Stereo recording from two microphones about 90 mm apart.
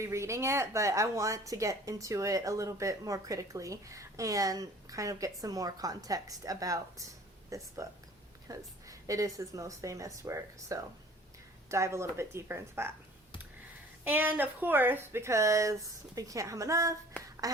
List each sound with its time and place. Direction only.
0.0 s a woman's voice: 35° right (ahead or behind)
14.0 s a woman's voice: 20° right (ahead or behind); by 16.9 s 35° right (ahead or behind)
17.4 s duck: 40° right (ahead or behind)